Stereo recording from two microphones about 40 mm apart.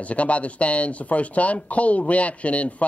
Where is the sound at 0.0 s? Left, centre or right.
Left.